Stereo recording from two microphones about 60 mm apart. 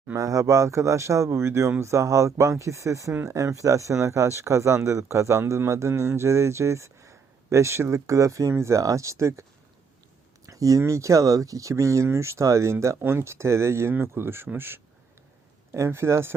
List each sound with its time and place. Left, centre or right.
0.2 s speech: right
8.8 s speech: right
10.4 s speech: right
13.0 s speech: right
15.7 s speech: right